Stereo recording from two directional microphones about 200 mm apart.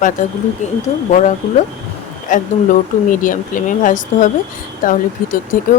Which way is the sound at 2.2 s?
40° left (ahead or behind).